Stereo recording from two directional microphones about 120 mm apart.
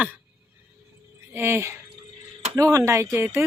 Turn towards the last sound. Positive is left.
turn(degrees=-20)  # may be behind; listen again after turning